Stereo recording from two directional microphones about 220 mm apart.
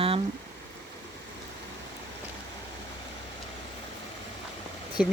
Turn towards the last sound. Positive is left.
turn(degrees=-5)  # may be behind; listen again after turning